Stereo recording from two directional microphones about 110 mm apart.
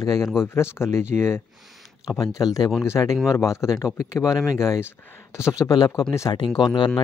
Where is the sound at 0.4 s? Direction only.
25° left (ahead or behind).